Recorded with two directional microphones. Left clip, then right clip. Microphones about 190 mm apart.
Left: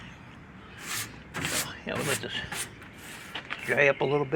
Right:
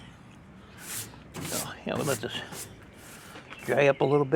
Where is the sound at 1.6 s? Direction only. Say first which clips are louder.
Right 1 dB; 50° right (ahead or behind).